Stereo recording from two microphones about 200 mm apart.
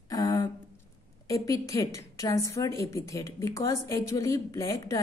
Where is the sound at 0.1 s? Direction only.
20° left (ahead or behind).